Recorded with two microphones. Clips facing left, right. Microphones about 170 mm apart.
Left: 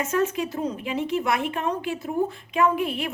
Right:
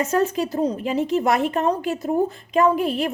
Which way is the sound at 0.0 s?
35° right (ahead or behind).